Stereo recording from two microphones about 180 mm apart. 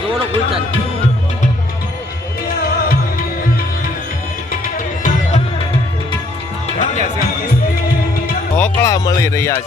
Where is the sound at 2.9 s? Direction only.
55° left (ahead or behind).